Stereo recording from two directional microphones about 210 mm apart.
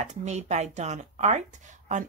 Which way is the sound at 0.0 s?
35° right (ahead or behind).